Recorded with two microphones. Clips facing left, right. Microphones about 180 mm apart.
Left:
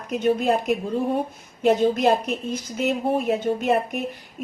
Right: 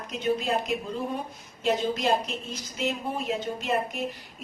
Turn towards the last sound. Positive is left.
turn(degrees=55)  # may be behind; listen again after turning